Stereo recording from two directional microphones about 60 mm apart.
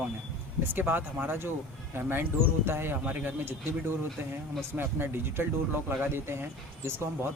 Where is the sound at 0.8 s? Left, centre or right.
Right.